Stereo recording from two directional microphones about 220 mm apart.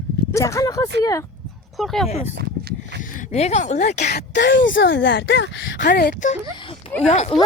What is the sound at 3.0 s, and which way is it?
A woman's voice, 35° left (ahead or behind).